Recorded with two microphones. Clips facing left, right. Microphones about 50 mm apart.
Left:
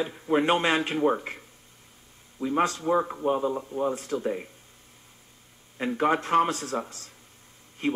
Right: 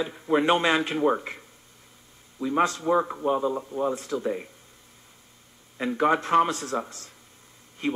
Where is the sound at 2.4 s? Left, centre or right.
Left.